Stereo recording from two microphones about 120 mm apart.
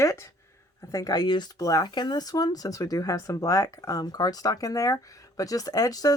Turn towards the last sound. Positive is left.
turn(degrees=30)  # may be behind; listen again after turning